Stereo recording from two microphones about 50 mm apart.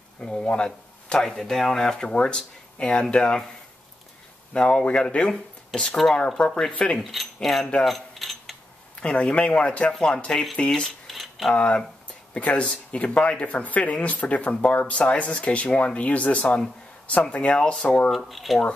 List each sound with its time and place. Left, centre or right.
0.2 s speech: centre
4.6 s speech: centre
5.7 s speech: centre
6.1 s speech: centre
7.0 s speech: centre
7.8 s keys jangling: centre
9.0 s speech: left
11.1 s a sound: centre
11.5 s speech: left
18.1 s speech: centre